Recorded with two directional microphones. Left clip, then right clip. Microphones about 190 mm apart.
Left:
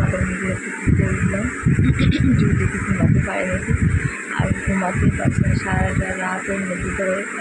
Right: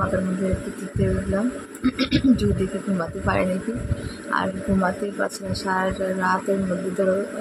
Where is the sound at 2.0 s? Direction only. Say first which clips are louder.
Left 1 dB; 20° right (ahead or behind).